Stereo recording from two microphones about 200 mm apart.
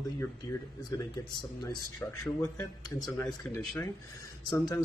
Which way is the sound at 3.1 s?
15° left (ahead or behind).